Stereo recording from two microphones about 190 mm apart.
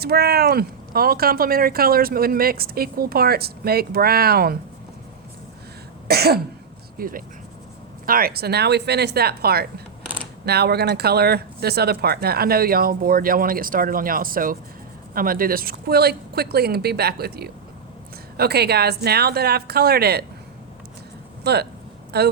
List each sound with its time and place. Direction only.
0.0 s speech: 55° right (ahead or behind)
6.1 s speech: 55° right (ahead or behind)
21.4 s speech: 60° right (ahead or behind)